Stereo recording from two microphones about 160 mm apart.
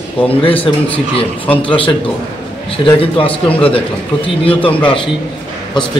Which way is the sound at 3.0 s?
35° left (ahead or behind).